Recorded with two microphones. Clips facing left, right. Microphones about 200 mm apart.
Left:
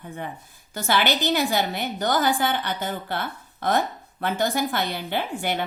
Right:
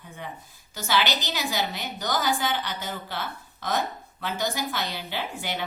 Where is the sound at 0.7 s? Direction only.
55° left (ahead or behind).